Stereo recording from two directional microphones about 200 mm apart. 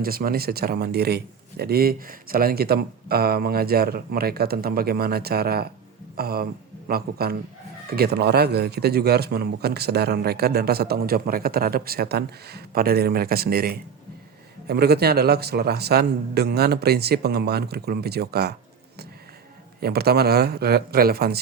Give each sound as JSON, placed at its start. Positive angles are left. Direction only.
{"t": 0.0, "sound": "a man's voice", "side_deg": -45}
{"t": 19.8, "sound": "a man's voice", "side_deg": -50}